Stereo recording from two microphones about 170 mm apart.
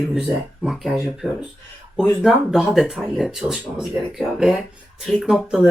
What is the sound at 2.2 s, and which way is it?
Speech, centre (ahead or behind).